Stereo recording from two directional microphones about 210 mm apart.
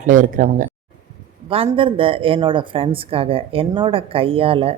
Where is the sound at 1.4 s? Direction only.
25° right (ahead or behind).